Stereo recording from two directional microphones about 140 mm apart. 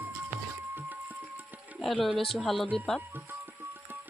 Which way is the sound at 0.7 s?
10° right (ahead or behind).